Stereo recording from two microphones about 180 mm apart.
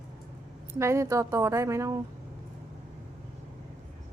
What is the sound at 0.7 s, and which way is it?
A woman's voice, 15° right (ahead or behind).